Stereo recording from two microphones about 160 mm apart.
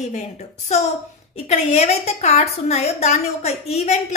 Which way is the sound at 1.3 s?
40° left (ahead or behind).